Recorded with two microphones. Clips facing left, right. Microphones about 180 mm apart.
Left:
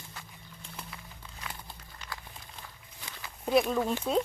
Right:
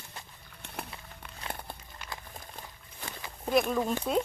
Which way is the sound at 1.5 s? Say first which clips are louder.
Right 6 dB; 60° right (ahead or behind).